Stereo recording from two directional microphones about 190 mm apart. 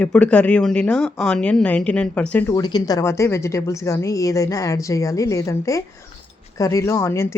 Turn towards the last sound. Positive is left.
turn(degrees=15)  # may be behind; listen again after turning